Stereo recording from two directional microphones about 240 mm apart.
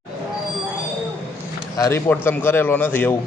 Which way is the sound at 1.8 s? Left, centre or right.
Centre.